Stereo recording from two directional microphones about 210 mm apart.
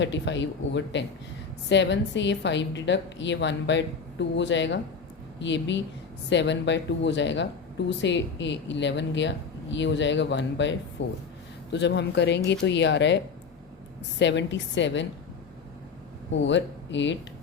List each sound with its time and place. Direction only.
0.0 s a woman's voice: 60° left (ahead or behind)
16.4 s a woman's voice: 60° left (ahead or behind)